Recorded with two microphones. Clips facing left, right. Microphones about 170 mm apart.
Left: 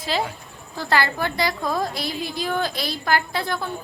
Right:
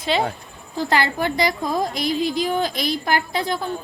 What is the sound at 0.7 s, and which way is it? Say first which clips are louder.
A woman's voice: right 2 dB; 20° right (ahead or behind).